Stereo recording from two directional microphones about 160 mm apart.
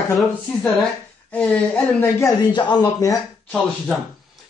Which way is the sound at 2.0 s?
20° left (ahead or behind).